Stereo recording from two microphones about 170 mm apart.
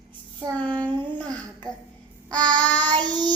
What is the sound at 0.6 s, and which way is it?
Child singing, 10° left (ahead or behind).